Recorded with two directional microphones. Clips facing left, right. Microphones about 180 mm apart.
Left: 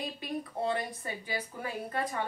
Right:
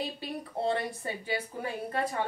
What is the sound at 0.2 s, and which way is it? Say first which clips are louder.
A woman's voice: right 1 dB; 30° right (ahead or behind).